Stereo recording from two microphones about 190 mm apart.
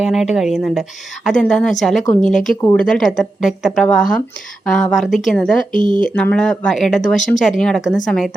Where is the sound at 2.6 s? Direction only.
15° left (ahead or behind).